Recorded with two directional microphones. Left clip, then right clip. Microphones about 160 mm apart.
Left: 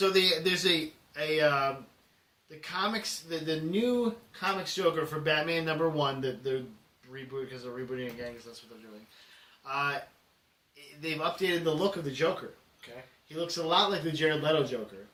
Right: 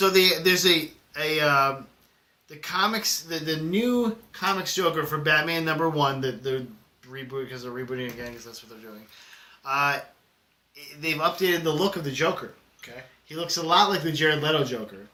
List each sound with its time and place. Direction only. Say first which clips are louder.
0.0 s speech: right 6 dB; 10° right (ahead or behind)
9.6 s speech: right 8 dB; 15° right (ahead or behind)
11.0 s speech: right 7 dB; 10° right (ahead or behind)
12.8 s speech: right 5 dB; 20° left (ahead or behind)
13.2 s speech: right 5 dB; 10° right (ahead or behind)